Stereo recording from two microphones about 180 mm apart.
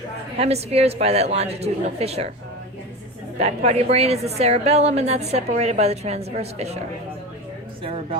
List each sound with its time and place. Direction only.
0.3 s a woman's voice: 35° right (ahead or behind)
3.3 s a woman's voice: 35° right (ahead or behind)